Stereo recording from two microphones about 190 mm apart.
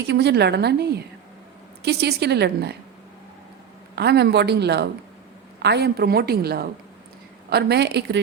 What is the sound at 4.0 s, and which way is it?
Speech, 60° right (ahead or behind).